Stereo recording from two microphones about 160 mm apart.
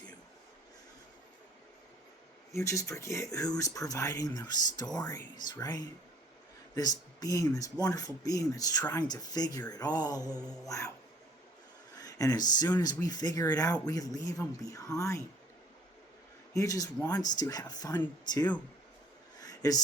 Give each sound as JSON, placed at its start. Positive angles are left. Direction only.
{"t": 2.5, "sound": "speech", "side_deg": 20}
{"t": 10.4, "sound": "mantra", "side_deg": 5}
{"t": 10.7, "sound": "speech", "side_deg": 20}
{"t": 11.9, "sound": "speech", "side_deg": 25}
{"t": 16.6, "sound": "speech", "side_deg": 20}
{"t": 19.4, "sound": "a sound", "side_deg": 25}